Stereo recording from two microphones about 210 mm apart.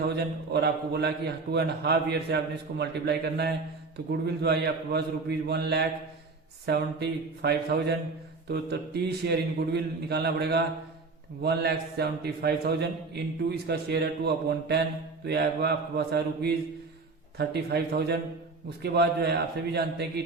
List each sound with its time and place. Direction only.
0.5 s a man's voice: 50° right (ahead or behind)